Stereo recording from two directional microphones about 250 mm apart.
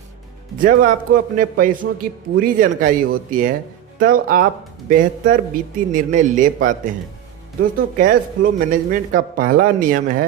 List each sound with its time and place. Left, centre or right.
0.5 s speech: right